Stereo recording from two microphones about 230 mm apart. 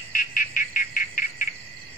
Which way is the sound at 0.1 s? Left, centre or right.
Left.